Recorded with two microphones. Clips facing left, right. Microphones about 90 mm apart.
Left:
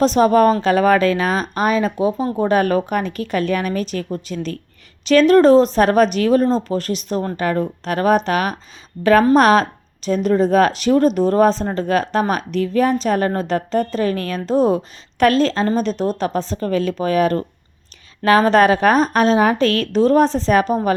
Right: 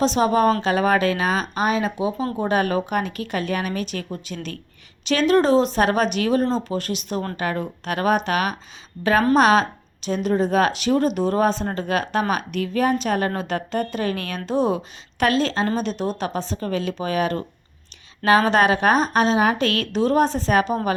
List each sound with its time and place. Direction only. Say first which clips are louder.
0.0 s a woman's voice: left 5 dB; 45° left (ahead or behind)